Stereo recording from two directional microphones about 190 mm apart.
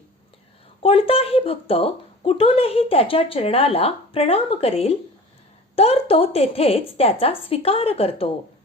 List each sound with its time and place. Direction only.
0.8 s a woman's voice: 30° left (ahead or behind)